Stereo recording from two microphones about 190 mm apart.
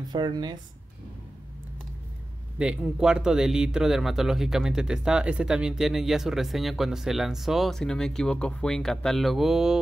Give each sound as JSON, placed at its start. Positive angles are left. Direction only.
{"t": 0.1, "sound": "speech", "side_deg": -25}
{"t": 2.6, "sound": "speech", "side_deg": -5}